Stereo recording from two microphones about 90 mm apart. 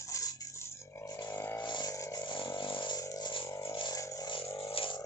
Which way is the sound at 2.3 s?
60° left (ahead or behind).